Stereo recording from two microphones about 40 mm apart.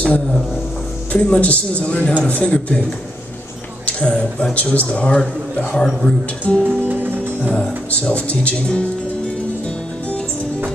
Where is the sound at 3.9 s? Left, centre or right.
Left.